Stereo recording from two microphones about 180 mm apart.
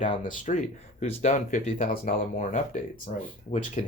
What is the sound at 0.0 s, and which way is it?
Speech, 40° left (ahead or behind).